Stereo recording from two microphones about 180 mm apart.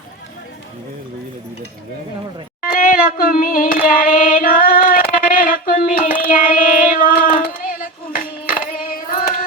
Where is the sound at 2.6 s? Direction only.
50° left (ahead or behind).